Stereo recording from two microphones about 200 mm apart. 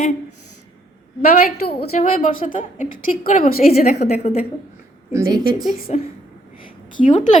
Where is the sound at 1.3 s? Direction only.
50° left (ahead or behind).